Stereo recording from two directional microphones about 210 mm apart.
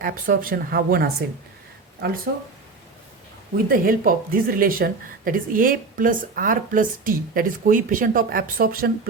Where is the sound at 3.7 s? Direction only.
40° right (ahead or behind).